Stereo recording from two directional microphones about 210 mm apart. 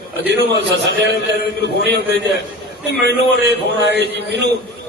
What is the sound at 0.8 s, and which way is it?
Speech, 55° left (ahead or behind).